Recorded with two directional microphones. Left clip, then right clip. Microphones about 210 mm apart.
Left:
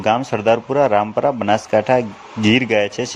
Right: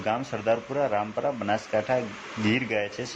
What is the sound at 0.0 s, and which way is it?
Speech, 40° left (ahead or behind).